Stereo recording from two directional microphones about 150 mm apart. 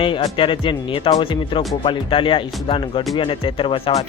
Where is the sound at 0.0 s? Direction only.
35° left (ahead or behind).